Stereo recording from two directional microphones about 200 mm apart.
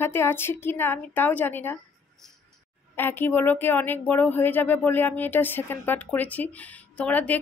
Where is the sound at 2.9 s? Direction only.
10° left (ahead or behind).